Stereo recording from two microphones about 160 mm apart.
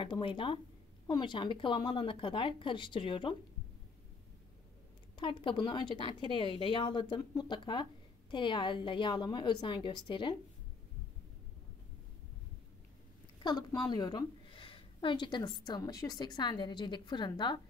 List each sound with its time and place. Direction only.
0.0 s speech: 30° left (ahead or behind)
5.1 s speech: 30° left (ahead or behind)
13.4 s speech: 25° left (ahead or behind)